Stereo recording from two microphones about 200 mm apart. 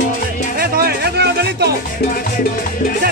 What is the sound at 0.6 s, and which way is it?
Music, 50° right (ahead or behind).